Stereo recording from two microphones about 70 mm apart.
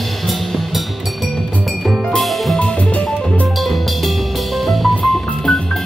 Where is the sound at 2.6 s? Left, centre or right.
Centre.